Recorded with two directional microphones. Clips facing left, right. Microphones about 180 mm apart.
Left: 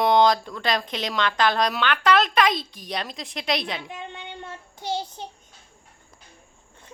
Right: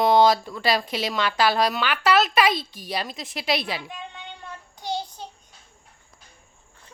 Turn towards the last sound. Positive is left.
turn(degrees=20)  # may be behind; listen again after turning